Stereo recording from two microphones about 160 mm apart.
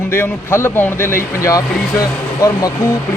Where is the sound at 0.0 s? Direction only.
15° left (ahead or behind).